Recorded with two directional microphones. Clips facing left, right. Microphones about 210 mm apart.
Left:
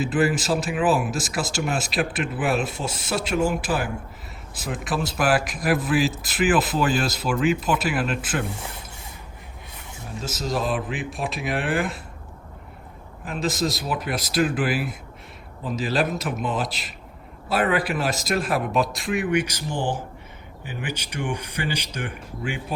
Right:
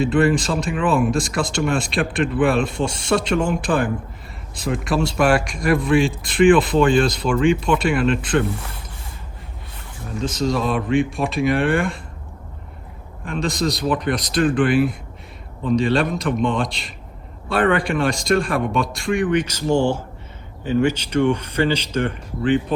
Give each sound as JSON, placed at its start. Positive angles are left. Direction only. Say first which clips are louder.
{"t": 0.0, "sound": "a man's voice", "louder": "right 5 dB", "side_deg": 5}
{"t": 10.2, "sound": "a man's voice", "louder": "right 5 dB", "side_deg": 5}
{"t": 13.2, "sound": "a man's voice", "louder": "right 3 dB", "side_deg": 5}